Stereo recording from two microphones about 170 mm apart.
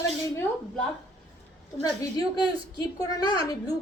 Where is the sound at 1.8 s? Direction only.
25° left (ahead or behind).